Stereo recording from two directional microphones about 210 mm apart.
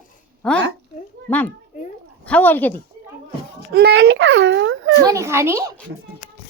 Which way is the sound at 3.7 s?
55° right (ahead or behind).